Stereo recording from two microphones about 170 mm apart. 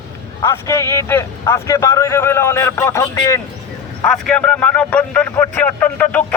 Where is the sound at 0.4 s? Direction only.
15° left (ahead or behind).